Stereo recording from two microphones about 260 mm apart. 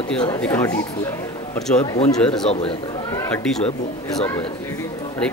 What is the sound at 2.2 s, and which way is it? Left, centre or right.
Speech, centre.